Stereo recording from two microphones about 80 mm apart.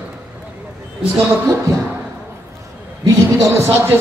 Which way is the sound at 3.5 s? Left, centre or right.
Right.